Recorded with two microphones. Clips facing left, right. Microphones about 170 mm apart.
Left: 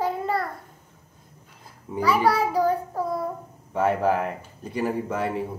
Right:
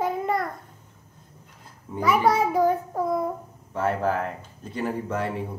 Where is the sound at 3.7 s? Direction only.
15° left (ahead or behind).